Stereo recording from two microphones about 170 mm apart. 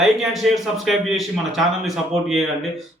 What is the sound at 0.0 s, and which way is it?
A man's voice, centre (ahead or behind).